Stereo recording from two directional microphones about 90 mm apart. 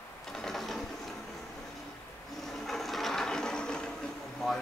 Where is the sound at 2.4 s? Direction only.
Centre (ahead or behind).